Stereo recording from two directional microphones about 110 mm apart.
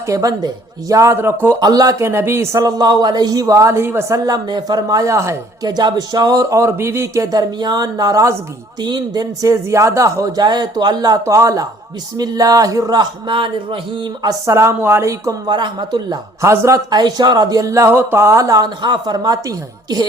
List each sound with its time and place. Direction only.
0.1 s speech: 35° right (ahead or behind)
1.6 s speech: 35° right (ahead or behind)
4.3 s speech: 40° right (ahead or behind)
5.7 s speech: 40° right (ahead or behind)
15.4 s speech: 45° right (ahead or behind)
16.4 s speech: 30° right (ahead or behind)